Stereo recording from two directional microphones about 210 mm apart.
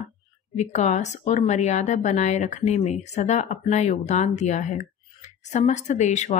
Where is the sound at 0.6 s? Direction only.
35° left (ahead or behind).